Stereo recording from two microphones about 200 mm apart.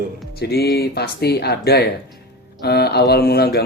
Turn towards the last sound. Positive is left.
turn(degrees=50)  # may be behind; listen again after turning